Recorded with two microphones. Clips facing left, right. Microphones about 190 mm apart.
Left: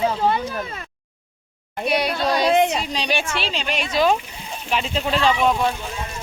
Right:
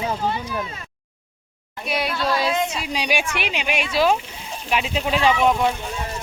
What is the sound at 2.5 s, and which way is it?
Speech, 65° left (ahead or behind).